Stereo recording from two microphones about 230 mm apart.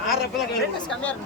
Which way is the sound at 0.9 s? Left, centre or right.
Centre.